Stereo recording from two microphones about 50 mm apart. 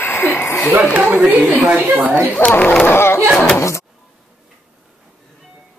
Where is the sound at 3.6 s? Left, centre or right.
Left.